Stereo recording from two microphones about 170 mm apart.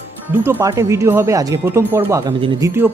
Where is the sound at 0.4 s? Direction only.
20° right (ahead or behind).